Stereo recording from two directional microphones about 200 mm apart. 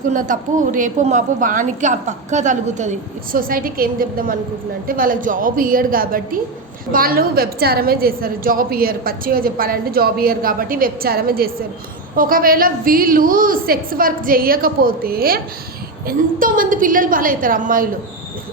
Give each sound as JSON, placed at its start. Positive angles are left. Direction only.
{"t": 0.1, "sound": "a woman's voice", "side_deg": -40}